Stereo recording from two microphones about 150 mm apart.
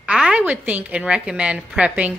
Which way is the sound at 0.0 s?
5° right (ahead or behind).